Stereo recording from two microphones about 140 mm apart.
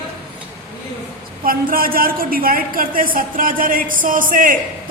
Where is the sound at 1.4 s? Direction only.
90° right.